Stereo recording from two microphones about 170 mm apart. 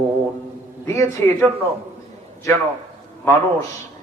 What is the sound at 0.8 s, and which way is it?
Mantra, 15° left (ahead or behind).